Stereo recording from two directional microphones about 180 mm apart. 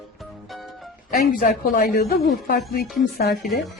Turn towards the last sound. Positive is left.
turn(degrees=60)  # may be behind; listen again after turning